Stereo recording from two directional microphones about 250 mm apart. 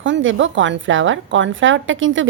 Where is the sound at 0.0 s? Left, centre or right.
Right.